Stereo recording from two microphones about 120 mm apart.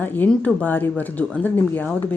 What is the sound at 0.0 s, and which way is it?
A woman's voice, 15° left (ahead or behind).